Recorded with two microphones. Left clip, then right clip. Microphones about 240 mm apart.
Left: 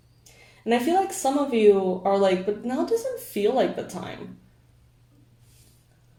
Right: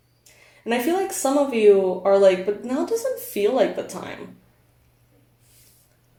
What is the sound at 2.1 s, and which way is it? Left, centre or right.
Speech, right.